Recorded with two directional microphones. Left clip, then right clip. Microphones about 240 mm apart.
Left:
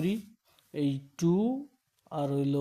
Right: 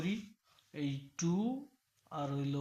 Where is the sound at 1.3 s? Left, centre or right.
Left.